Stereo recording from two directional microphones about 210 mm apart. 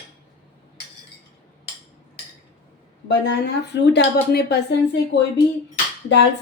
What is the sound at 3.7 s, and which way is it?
Speech, 50° left (ahead or behind).